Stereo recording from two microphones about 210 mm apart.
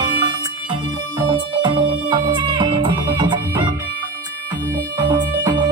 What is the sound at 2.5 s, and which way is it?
Music, 25° right (ahead or behind).